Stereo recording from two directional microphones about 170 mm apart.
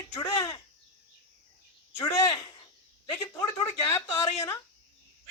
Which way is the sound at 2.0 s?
20° left (ahead or behind).